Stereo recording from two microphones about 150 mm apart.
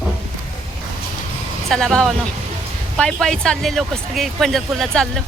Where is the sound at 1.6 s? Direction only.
Centre (ahead or behind).